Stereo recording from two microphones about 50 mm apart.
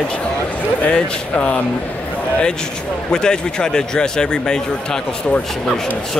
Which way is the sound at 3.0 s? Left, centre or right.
Centre.